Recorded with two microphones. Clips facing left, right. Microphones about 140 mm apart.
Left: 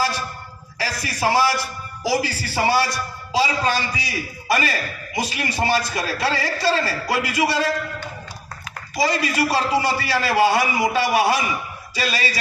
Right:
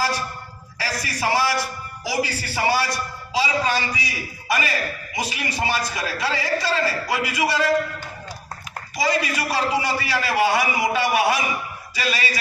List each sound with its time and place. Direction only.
0.8 s a man's voice: 30° left (ahead or behind)
9.0 s a man's voice: 30° left (ahead or behind)